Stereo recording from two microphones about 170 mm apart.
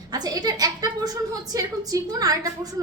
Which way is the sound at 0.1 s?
20° right (ahead or behind).